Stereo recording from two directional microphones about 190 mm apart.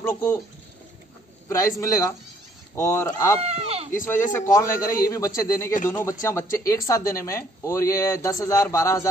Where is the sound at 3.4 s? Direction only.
30° right (ahead or behind).